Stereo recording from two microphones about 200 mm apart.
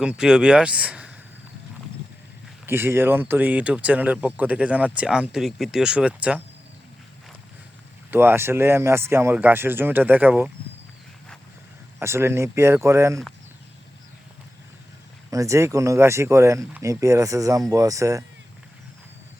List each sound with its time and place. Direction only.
0.0 s speech: 5° right (ahead or behind)
2.6 s speech: 10° right (ahead or behind)
8.1 s speech: 10° right (ahead or behind)
11.9 s speech: 10° right (ahead or behind)
15.3 s speech: 15° right (ahead or behind)